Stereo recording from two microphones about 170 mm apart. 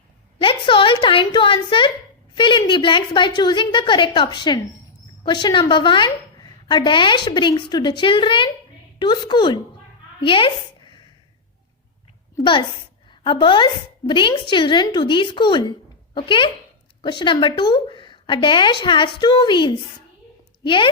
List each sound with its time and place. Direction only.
0.3 s a woman's voice: 30° left (ahead or behind)
10.2 s a sound: 30° left (ahead or behind)
13.1 s a woman's voice: 30° left (ahead or behind)